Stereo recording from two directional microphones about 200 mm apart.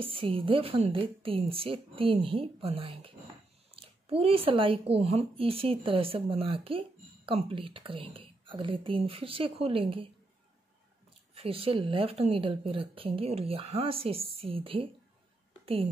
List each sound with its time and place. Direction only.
0.0 s speech: 25° right (ahead or behind)
11.3 s speech: 30° right (ahead or behind)